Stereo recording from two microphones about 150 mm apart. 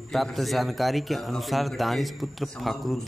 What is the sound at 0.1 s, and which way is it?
Speech, centre (ahead or behind).